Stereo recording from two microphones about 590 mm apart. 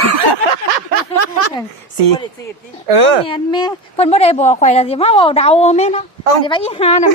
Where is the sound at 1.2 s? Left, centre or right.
Right.